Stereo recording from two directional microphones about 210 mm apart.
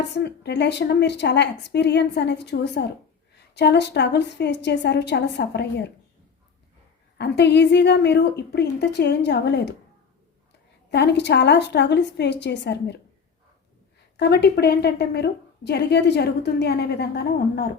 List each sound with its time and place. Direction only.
0.0 s a woman's voice: 50° left (ahead or behind)
7.2 s a woman's voice: 55° left (ahead or behind)
10.9 s a woman's voice: 55° left (ahead or behind)
14.2 s a woman's voice: 50° left (ahead or behind)